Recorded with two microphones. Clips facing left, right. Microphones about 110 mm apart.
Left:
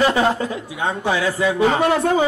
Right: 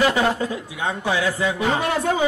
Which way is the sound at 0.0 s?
25° left (ahead or behind).